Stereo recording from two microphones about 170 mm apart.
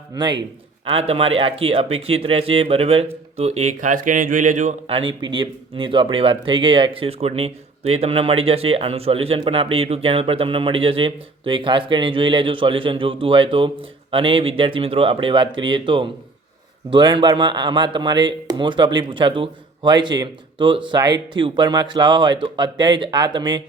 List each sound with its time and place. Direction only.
0.1 s a man's voice: 25° right (ahead or behind); by 4.9 s 45° right (ahead or behind)
4.9 s a man's voice: 30° right (ahead or behind)